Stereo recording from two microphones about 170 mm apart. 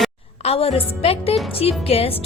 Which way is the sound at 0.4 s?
35° left (ahead or behind).